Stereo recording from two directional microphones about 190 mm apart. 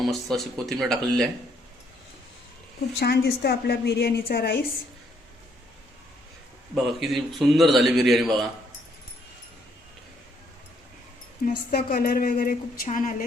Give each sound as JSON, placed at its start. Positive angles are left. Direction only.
{"t": 0.0, "sound": "a man's voice", "side_deg": 0}
{"t": 3.0, "sound": "a woman's voice", "side_deg": 55}
{"t": 6.8, "sound": "a man's voice", "side_deg": 0}
{"t": 11.4, "sound": "a woman's voice", "side_deg": 50}